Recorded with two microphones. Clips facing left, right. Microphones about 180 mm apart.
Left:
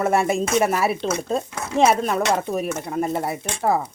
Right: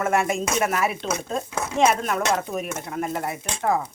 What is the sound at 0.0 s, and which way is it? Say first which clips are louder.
Speech: left 3 dB; 35° left (ahead or behind).